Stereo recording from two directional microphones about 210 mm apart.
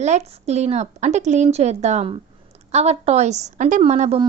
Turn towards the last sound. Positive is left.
turn(degrees=-30)  # may be behind; listen again after turning